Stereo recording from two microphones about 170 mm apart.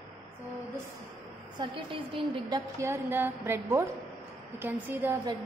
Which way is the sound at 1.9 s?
30° right (ahead or behind).